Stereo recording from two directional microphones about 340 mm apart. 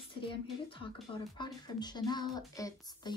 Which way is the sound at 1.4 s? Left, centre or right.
Centre.